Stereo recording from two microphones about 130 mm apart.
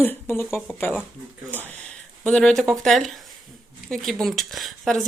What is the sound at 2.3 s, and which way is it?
Speech, 5° left (ahead or behind).